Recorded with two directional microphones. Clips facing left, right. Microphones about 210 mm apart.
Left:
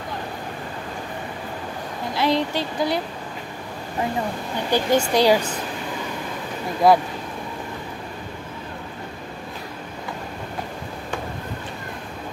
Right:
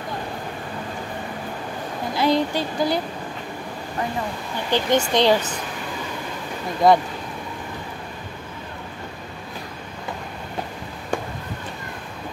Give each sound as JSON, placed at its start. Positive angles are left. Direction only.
{"t": 2.1, "sound": "speech", "side_deg": 0}
{"t": 4.6, "sound": "speech", "side_deg": 10}
{"t": 6.8, "sound": "speech", "side_deg": 5}